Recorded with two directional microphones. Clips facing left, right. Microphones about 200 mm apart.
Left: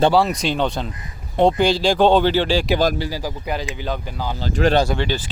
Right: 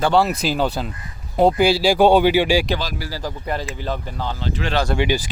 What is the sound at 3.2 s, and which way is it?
Speech, 5° left (ahead or behind).